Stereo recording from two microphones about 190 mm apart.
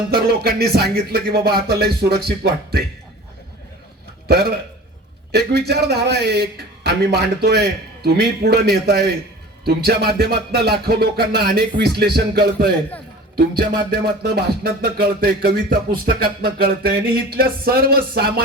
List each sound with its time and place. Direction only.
0.1 s a man's voice: 55° right (ahead or behind)
4.3 s a man's voice: 55° right (ahead or behind)
16.0 s a sound: 55° right (ahead or behind)